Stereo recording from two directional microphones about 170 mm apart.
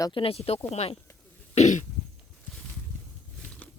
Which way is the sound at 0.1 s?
35° left (ahead or behind).